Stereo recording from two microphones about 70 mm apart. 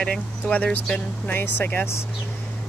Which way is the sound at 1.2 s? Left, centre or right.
Left.